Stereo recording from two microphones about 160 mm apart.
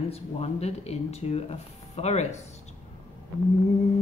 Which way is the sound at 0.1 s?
40° left (ahead or behind).